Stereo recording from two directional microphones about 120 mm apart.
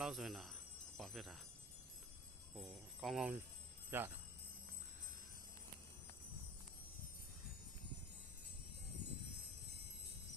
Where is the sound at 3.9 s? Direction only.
15° right (ahead or behind).